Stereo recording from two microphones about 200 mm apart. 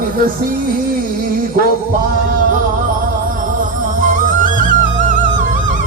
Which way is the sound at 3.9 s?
40° right (ahead or behind).